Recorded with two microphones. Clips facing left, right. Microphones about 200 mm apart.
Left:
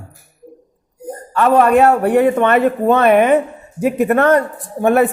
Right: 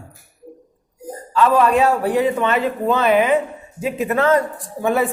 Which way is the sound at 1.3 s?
60° left (ahead or behind).